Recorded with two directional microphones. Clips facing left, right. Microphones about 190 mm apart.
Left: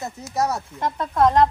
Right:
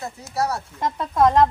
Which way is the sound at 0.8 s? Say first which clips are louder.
Right 1 dB; centre (ahead or behind).